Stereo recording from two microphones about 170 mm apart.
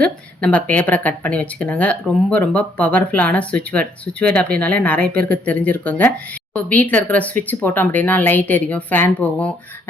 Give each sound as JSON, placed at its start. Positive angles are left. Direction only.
{"t": 0.0, "sound": "speech", "side_deg": 5}